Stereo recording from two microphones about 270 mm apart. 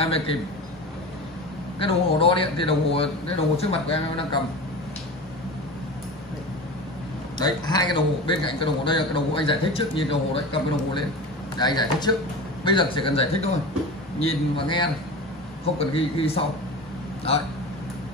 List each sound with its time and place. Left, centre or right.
0.0 s a man's voice: left
1.8 s a man's voice: left
7.3 s a man's voice: centre